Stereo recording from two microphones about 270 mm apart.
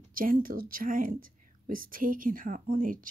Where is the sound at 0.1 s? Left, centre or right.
Right.